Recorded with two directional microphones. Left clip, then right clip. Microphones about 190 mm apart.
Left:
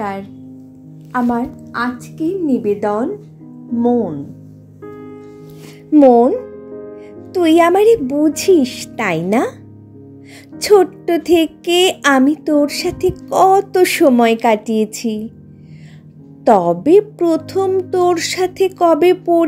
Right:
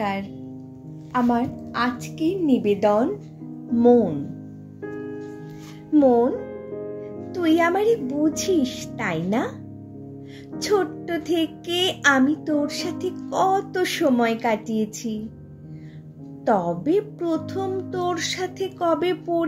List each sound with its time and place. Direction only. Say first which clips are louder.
1.3 s a woman's voice: left 4 dB; centre (ahead or behind)
5.9 s a woman's voice: left 9 dB; 35° left (ahead or behind)
10.6 s a woman's voice: left 11 dB; 45° left (ahead or behind)
16.4 s a woman's voice: left 10 dB; 45° left (ahead or behind)